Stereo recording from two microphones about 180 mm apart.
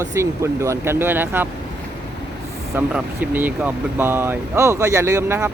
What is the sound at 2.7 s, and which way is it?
Speech, 10° right (ahead or behind).